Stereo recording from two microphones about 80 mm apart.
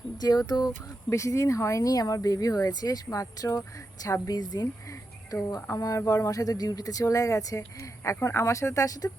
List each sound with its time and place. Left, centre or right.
0.2 s speech: left
1.1 s speech: left